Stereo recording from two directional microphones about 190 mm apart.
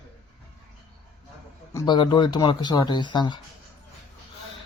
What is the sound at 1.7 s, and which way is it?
Speech, 20° left (ahead or behind).